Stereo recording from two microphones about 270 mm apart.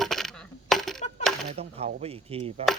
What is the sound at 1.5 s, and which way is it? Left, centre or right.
Speech, right.